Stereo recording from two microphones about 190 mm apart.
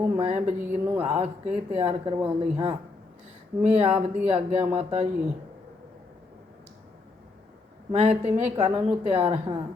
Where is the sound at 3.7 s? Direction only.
30° right (ahead or behind).